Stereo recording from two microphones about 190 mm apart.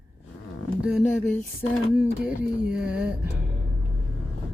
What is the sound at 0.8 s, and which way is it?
Speech, 5° right (ahead or behind).